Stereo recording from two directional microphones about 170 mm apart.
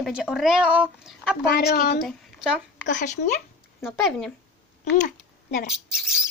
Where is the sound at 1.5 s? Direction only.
65° left (ahead or behind).